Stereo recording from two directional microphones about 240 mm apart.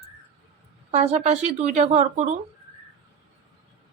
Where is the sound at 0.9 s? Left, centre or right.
Right.